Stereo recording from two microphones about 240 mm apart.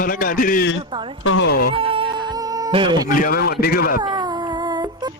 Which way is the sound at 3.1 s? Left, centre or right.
Left.